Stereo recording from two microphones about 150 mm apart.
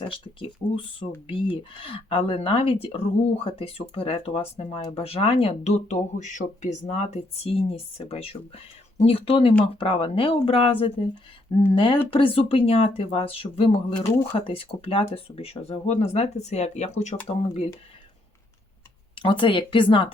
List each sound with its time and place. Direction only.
0.1 s speech: 35° left (ahead or behind)
14.1 s speech: 20° left (ahead or behind)
14.3 s speech: 40° left (ahead or behind)
19.1 s speech: 35° left (ahead or behind)